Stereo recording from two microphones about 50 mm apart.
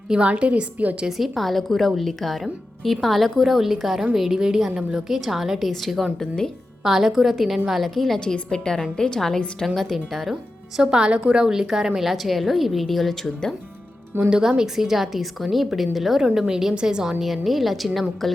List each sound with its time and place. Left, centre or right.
0.1 s a woman's voice: right
1.0 s a woman's voice: centre
8.2 s a woman's voice: centre
10.8 s a woman's voice: centre
14.3 s a woman's voice: centre
17.2 s speech: centre